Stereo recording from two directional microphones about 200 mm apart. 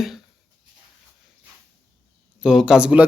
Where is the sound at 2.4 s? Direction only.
5° right (ahead or behind).